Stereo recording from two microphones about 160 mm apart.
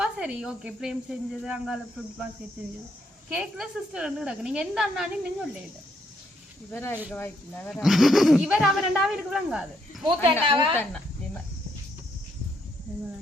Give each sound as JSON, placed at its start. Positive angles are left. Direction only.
{"t": 0.0, "sound": "speech", "side_deg": -5}
{"t": 3.2, "sound": "speech", "side_deg": -5}
{"t": 6.7, "sound": "speech", "side_deg": 15}
{"t": 7.7, "sound": "speech", "side_deg": 0}
{"t": 10.5, "sound": "speech", "side_deg": -35}